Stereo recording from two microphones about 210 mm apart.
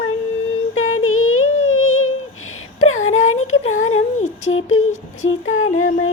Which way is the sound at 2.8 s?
80° left.